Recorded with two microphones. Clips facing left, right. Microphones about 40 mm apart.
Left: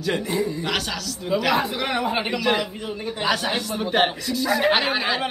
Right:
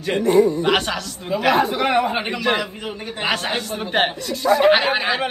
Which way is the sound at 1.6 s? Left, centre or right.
Right.